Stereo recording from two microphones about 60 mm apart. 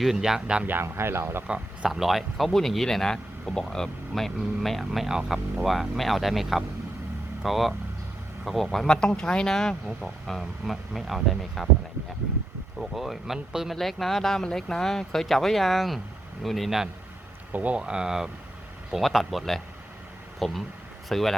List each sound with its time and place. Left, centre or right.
0.0 s speech: centre
0.7 s speech: right
1.5 s speech: centre
1.9 s speech: centre
12.8 s speech: centre
17.5 s speech: right; by 21.3 s centre